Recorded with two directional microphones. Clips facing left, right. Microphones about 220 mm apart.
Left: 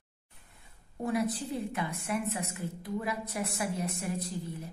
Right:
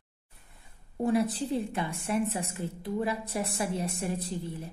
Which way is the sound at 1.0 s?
30° right (ahead or behind).